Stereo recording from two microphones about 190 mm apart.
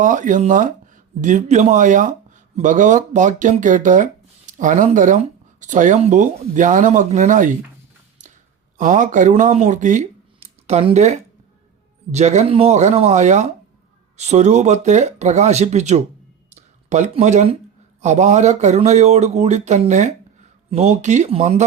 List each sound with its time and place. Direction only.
0.0 s speech: 45° right (ahead or behind)
8.2 s a sound: 40° right (ahead or behind)
8.8 s speech: 40° right (ahead or behind)